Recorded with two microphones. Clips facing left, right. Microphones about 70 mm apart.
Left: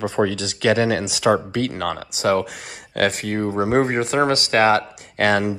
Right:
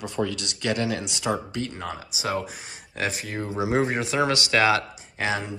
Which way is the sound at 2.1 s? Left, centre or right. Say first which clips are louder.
Left 9 dB; left.